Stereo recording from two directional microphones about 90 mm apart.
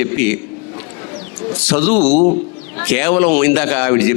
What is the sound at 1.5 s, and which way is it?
A man's voice, 20° left (ahead or behind).